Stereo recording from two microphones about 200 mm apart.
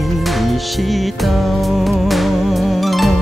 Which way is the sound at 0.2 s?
Centre (ahead or behind).